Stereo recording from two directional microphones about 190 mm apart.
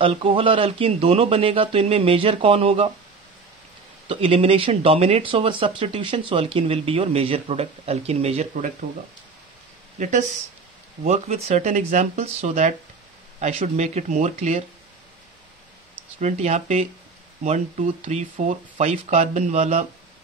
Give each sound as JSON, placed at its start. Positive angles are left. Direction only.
{"t": 0.0, "sound": "speech", "side_deg": -25}
{"t": 4.1, "sound": "speech", "side_deg": -30}
{"t": 9.9, "sound": "speech", "side_deg": -40}
{"t": 16.2, "sound": "speech", "side_deg": -35}